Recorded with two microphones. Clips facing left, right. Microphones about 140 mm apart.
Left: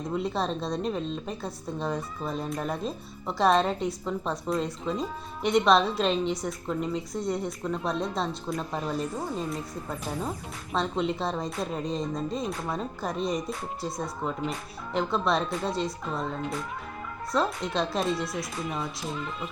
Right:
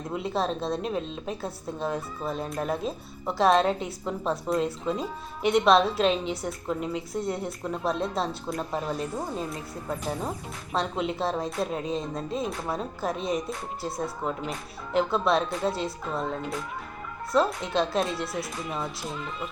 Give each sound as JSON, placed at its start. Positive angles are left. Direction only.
{"t": 0.1, "sound": "speech", "side_deg": 0}